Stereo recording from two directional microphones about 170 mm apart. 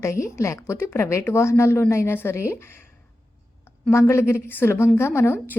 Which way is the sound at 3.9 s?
15° left (ahead or behind).